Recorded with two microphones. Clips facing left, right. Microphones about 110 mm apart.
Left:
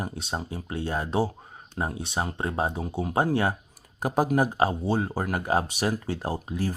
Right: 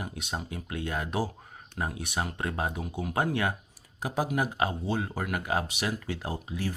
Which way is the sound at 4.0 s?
45° left (ahead or behind).